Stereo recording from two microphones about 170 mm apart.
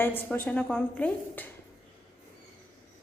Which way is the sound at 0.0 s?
10° left (ahead or behind).